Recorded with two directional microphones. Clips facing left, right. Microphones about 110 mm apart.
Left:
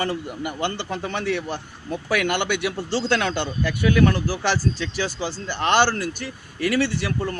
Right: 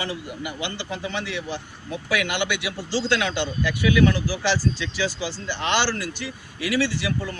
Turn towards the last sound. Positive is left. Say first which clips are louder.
# left 2 dB
turn(degrees=55)  # may be behind; listen again after turning